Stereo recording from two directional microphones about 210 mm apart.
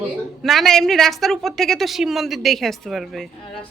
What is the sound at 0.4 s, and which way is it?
A woman's voice, centre (ahead or behind).